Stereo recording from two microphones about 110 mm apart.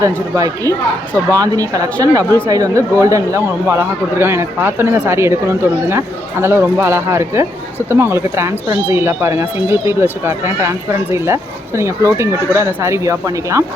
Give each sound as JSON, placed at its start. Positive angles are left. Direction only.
{"t": 0.3, "sound": "speech", "side_deg": -35}